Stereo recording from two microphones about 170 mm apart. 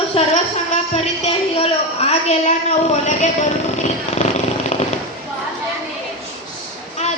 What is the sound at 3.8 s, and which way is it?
Vehicle, 40° left (ahead or behind).